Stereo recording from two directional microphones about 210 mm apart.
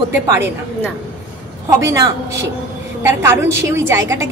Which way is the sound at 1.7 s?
15° right (ahead or behind).